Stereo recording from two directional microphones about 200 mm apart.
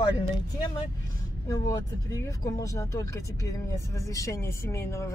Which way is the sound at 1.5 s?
15° left (ahead or behind).